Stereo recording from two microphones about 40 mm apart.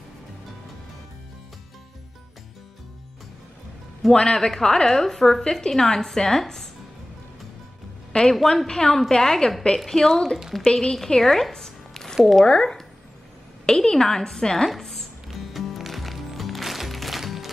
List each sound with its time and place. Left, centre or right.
4.1 s a woman's voice: centre
8.1 s a woman's voice: centre
12.4 s a woman's voice: left
14.8 s music: centre